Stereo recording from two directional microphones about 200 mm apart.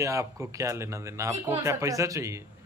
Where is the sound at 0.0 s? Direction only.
15° right (ahead or behind).